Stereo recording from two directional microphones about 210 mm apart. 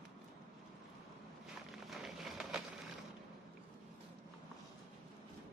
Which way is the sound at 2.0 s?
Centre (ahead or behind).